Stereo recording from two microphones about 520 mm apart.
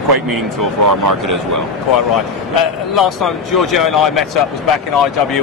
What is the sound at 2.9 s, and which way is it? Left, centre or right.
Speech, centre.